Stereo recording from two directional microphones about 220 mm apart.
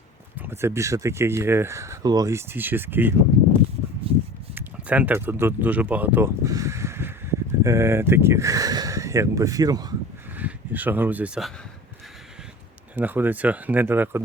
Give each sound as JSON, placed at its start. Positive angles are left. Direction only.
{"t": 0.3, "sound": "speech", "side_deg": -10}
{"t": 4.1, "sound": "a sound", "side_deg": -25}
{"t": 4.5, "sound": "speech", "side_deg": -5}
{"t": 13.0, "sound": "speech", "side_deg": -10}